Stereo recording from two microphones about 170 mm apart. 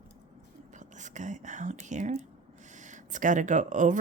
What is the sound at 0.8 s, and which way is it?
Speech, 45° right (ahead or behind).